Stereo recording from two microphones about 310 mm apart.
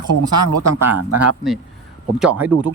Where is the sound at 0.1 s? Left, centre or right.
Right.